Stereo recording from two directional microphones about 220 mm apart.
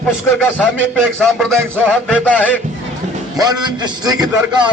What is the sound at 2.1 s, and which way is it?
Speech, 5° left (ahead or behind).